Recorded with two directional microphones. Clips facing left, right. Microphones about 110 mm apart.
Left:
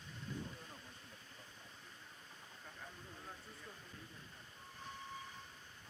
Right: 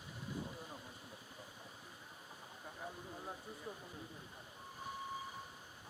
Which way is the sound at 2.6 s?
20° right (ahead or behind).